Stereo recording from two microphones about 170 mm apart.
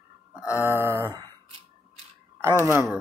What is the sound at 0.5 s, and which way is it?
Speech, 15° right (ahead or behind).